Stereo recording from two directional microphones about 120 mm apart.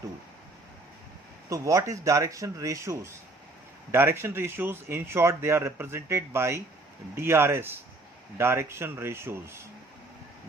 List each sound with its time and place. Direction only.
1.5 s speech: 25° right (ahead or behind)